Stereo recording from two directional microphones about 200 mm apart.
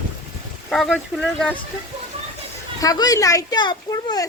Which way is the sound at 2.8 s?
20° left (ahead or behind).